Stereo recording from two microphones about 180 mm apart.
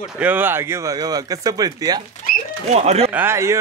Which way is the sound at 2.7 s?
35° right (ahead or behind).